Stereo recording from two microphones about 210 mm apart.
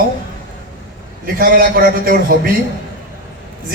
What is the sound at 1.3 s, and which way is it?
A man's voice, 45° right (ahead or behind).